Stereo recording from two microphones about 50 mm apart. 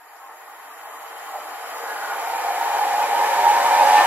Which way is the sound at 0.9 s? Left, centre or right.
Right.